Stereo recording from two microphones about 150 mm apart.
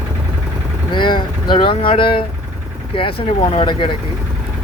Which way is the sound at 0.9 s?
30° left (ahead or behind).